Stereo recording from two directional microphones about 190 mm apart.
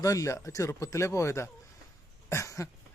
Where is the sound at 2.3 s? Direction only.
15° left (ahead or behind).